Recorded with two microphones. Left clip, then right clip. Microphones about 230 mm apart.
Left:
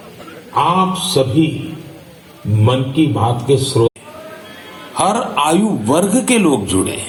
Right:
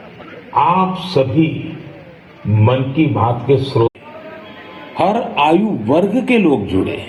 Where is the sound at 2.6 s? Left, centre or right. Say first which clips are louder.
Even; left.